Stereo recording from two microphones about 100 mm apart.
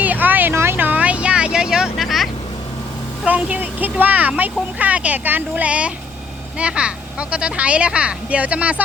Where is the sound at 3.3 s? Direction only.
15° right (ahead or behind).